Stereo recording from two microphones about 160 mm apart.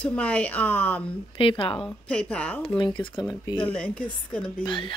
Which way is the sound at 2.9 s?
30° left (ahead or behind).